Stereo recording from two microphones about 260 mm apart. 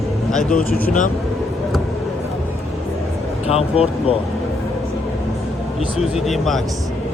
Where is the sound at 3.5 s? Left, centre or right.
Left.